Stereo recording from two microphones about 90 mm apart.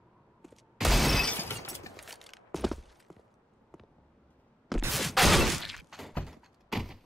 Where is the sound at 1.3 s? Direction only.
25° left (ahead or behind).